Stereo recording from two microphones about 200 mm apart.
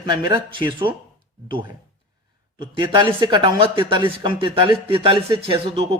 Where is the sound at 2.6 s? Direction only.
25° right (ahead or behind).